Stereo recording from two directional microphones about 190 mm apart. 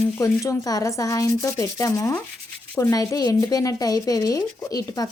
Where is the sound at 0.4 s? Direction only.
20° left (ahead or behind).